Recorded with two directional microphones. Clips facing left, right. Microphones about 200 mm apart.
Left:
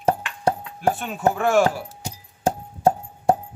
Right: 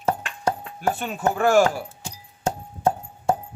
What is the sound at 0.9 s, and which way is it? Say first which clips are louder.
Chopping: left 2 dB; centre (ahead or behind).